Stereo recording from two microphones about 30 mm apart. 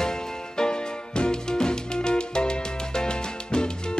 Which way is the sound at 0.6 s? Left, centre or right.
Left.